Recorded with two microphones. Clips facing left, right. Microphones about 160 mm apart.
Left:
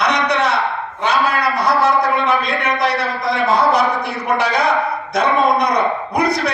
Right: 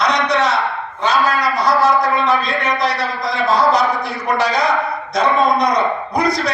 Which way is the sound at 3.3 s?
60° left (ahead or behind).